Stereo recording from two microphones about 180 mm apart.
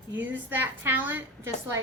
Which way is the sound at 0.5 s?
10° right (ahead or behind).